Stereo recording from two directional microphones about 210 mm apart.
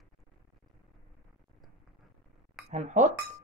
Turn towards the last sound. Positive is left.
turn(degrees=-35)  # may be behind; listen again after turning